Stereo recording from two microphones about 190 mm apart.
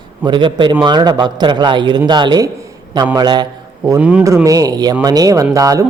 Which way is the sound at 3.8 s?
10° right (ahead or behind).